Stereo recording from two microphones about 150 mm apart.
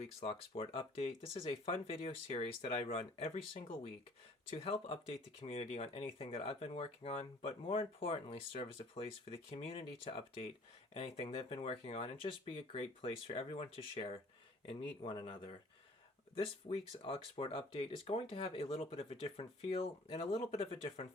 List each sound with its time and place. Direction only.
0.0 s speech: 40° left (ahead or behind)
16.6 s speech: 35° left (ahead or behind)